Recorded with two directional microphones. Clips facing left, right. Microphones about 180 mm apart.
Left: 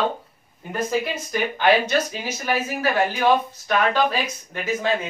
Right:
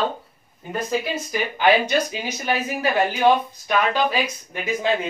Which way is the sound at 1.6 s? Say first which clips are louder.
Right 1 dB; 10° right (ahead or behind).